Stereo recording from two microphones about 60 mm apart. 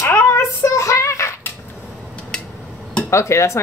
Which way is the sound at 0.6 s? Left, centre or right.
Left.